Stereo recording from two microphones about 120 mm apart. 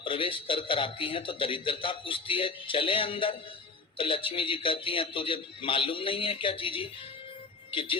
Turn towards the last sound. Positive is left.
turn(degrees=45)  # may be behind; listen again after turning